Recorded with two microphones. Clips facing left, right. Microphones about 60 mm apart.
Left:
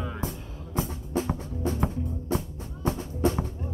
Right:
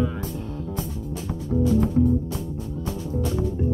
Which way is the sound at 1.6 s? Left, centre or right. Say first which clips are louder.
Right 9 dB; left.